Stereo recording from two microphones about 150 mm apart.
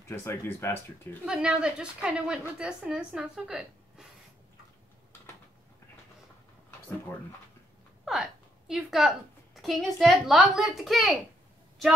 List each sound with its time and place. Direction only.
0.1 s speech: 15° left (ahead or behind)
1.2 s a woman's voice: 5° right (ahead or behind)
8.0 s a sound: centre (ahead or behind)
9.6 s a woman's voice: centre (ahead or behind)